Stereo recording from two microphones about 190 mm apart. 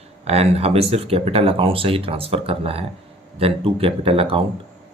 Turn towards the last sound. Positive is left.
turn(degrees=-30)  # may be behind; listen again after turning